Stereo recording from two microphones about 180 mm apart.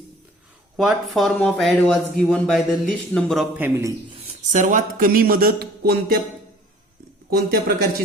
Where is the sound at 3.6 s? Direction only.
15° right (ahead or behind).